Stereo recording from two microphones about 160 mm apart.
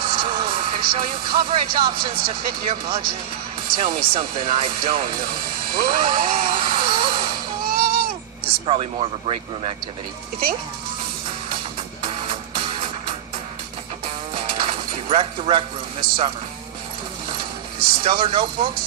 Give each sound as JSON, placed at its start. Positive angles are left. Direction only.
{"t": 0.0, "sound": "speech", "side_deg": -30}
{"t": 4.1, "sound": "speech", "side_deg": -30}
{"t": 7.6, "sound": "a sound", "side_deg": -65}
{"t": 8.6, "sound": "speech", "side_deg": -35}
{"t": 12.0, "sound": "music", "side_deg": -30}
{"t": 14.8, "sound": "speech", "side_deg": -35}
{"t": 17.7, "sound": "speech", "side_deg": -30}